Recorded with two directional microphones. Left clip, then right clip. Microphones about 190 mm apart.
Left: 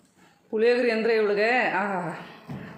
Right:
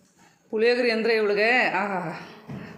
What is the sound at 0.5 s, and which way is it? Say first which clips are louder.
A woman's voice: even; centre (ahead or behind).